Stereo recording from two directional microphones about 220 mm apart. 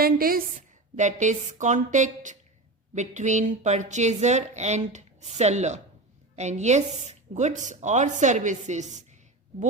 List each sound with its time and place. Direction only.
0.0 s a woman's voice: 40° right (ahead or behind)